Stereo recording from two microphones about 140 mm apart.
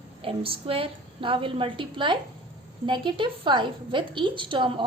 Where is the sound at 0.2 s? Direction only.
40° right (ahead or behind).